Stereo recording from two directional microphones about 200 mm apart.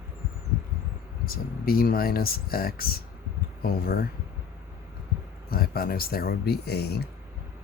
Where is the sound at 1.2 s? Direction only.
45° left (ahead or behind).